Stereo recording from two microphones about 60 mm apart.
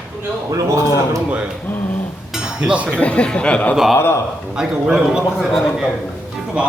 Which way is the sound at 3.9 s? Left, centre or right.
Left.